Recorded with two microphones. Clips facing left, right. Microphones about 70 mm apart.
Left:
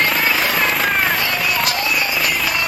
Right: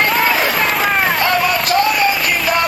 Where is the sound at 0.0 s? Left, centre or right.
Centre.